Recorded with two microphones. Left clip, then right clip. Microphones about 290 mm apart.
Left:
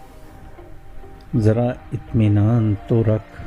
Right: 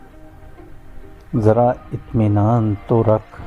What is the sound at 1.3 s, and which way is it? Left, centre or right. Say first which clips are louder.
Mantra: right 6 dB; right.